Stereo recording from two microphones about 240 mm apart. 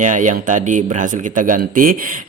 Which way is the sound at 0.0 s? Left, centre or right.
Right.